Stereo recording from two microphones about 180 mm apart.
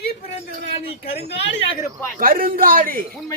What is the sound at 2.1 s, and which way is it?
Speech, 50° right (ahead or behind).